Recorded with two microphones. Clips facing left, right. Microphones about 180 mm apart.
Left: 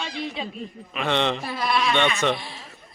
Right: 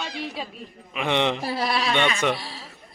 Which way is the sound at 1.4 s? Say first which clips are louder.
Left 1 dB; 35° right (ahead or behind).